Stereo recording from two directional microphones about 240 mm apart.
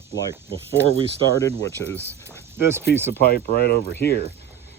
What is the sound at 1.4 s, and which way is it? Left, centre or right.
Speech, centre.